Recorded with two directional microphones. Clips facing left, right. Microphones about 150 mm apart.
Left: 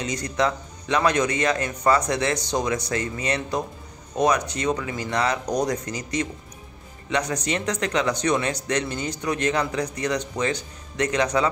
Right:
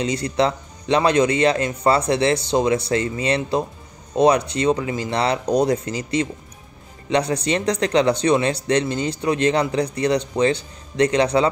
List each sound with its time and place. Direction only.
0.0 s a man's voice: 30° right (ahead or behind)